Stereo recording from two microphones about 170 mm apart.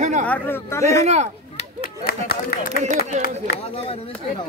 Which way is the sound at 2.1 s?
60° left (ahead or behind).